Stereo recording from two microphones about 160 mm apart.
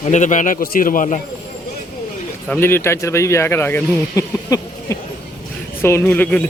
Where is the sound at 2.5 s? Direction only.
15° left (ahead or behind).